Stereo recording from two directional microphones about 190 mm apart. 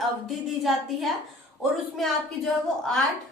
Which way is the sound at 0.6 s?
Centre (ahead or behind).